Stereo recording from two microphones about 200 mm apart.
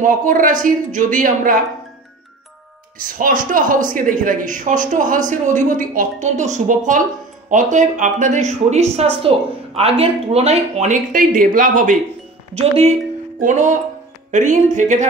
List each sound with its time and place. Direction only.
0.0 s speech: 40° right (ahead or behind)
3.0 s speech: 45° right (ahead or behind)
12.5 s speech: 30° right (ahead or behind)